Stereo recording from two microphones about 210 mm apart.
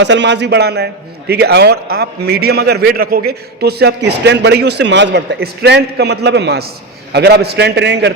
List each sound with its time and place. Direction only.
0.0 s a man's voice: 60° right (ahead or behind)